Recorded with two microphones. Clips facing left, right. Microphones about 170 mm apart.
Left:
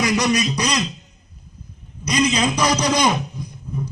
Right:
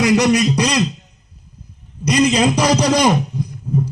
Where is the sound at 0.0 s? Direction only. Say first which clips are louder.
Right 6 dB; 30° right (ahead or behind).